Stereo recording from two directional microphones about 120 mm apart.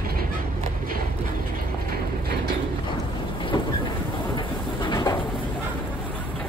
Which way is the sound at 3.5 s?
45° left (ahead or behind).